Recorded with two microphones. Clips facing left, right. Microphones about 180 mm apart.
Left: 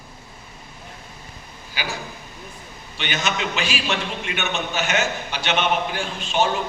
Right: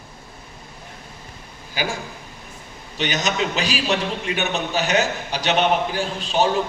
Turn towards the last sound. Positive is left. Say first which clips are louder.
# right 2 dB
turn(degrees=-35)  # may be behind; listen again after turning